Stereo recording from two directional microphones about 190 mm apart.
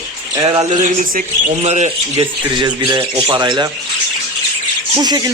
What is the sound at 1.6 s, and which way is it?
Speech, 35° right (ahead or behind).